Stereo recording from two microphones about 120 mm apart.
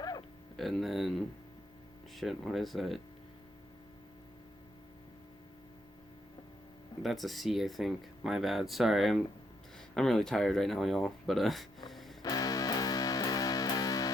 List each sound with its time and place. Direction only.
0.0 s music: 35° left (ahead or behind)
0.5 s speech: centre (ahead or behind)
7.0 s speech: centre (ahead or behind)
11.9 s music: centre (ahead or behind)
12.2 s music: 30° left (ahead or behind)